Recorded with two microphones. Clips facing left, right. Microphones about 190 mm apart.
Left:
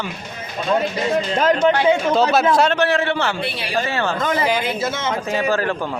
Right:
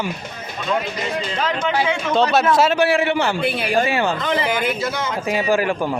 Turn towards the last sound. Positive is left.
turn(degrees=-10)  # may be behind; listen again after turning